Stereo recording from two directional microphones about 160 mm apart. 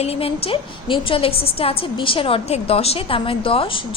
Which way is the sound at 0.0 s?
35° left (ahead or behind).